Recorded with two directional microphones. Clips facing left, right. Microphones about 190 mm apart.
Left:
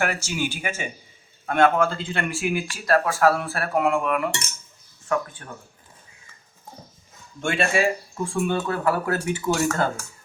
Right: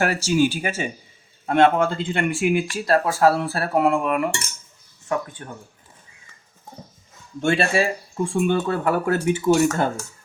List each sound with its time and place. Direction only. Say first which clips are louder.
0.0 s speech: right 7 dB; 35° right (ahead or behind)
7.4 s speech: right 4 dB; 35° right (ahead or behind)
8.2 s speech: right 4 dB; 25° right (ahead or behind)